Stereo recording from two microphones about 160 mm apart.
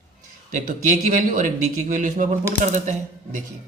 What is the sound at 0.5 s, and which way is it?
A man's voice, 55° right (ahead or behind).